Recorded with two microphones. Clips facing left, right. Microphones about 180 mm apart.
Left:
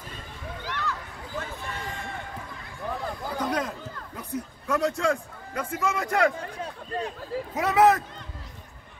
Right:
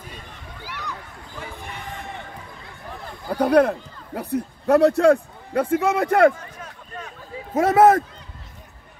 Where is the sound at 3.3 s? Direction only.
65° right (ahead or behind).